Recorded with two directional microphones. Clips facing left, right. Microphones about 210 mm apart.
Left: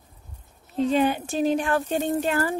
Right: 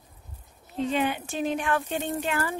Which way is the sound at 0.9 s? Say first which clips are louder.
Left 5 dB; 40° left (ahead or behind).